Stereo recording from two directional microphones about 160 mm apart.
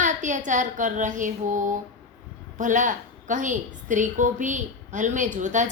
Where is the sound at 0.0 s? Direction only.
50° right (ahead or behind).